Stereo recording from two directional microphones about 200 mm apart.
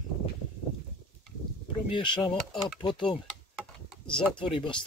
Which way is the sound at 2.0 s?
25° left (ahead or behind).